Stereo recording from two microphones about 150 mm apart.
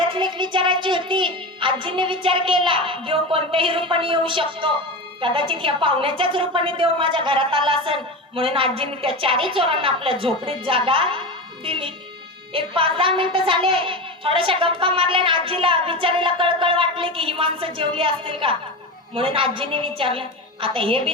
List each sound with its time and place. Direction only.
0.1 s a child's voice: 30° right (ahead or behind)